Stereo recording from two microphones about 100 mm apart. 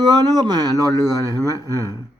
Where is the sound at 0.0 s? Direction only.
40° right (ahead or behind).